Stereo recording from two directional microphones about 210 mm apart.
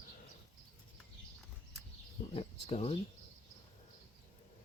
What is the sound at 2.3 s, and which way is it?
Speech, 30° left (ahead or behind).